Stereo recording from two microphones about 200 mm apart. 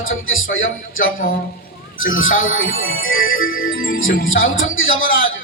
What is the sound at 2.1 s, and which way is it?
Speech, 80° left.